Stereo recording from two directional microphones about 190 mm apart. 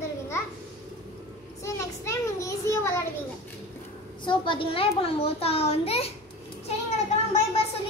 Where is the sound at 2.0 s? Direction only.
15° left (ahead or behind).